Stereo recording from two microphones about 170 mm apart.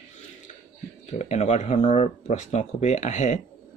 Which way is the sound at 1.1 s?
40° left (ahead or behind).